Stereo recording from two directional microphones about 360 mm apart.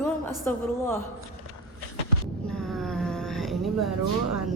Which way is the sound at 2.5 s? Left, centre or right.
Centre.